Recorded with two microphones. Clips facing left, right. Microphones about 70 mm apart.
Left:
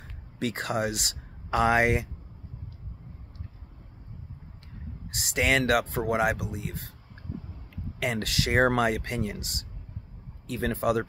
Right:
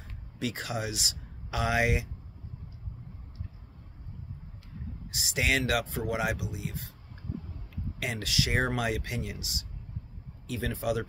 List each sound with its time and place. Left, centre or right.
0.4 s speech: left
5.1 s speech: left